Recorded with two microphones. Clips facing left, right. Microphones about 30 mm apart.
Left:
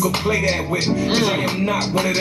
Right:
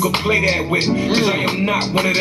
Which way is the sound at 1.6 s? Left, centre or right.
Right.